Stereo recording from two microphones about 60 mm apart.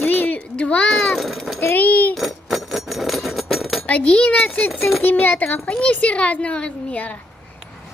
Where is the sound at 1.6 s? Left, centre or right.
Left.